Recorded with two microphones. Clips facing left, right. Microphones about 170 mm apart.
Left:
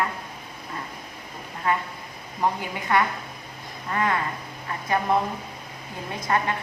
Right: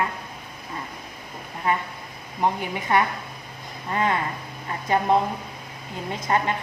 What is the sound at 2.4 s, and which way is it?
A woman's voice, 20° right (ahead or behind).